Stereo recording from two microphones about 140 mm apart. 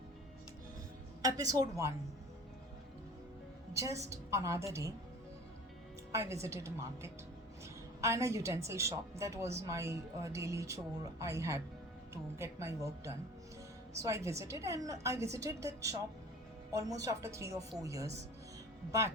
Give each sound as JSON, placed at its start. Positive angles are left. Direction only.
{"t": 1.2, "sound": "a woman's voice", "side_deg": -25}
{"t": 3.8, "sound": "a woman's voice", "side_deg": -25}
{"t": 6.1, "sound": "a woman's voice", "side_deg": -20}
{"t": 17.0, "sound": "a woman's voice", "side_deg": -20}